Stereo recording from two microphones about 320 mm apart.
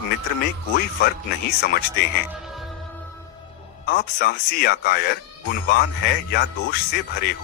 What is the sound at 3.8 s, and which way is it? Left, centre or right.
Speech, left.